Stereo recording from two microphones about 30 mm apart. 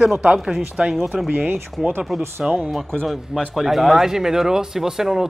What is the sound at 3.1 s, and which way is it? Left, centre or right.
Speech, centre.